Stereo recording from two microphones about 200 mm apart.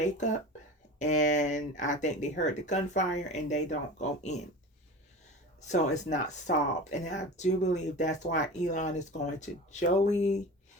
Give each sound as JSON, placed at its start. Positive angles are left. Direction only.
{"t": 0.0, "sound": "speech", "side_deg": 35}
{"t": 5.6, "sound": "speech", "side_deg": 35}